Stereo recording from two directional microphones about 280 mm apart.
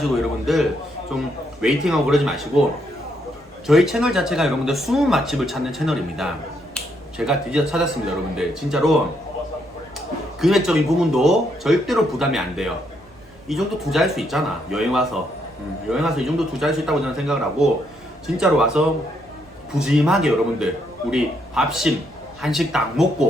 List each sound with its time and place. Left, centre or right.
0.0 s speech: centre
3.7 s speech: centre
10.4 s speech: centre
19.8 s speech: centre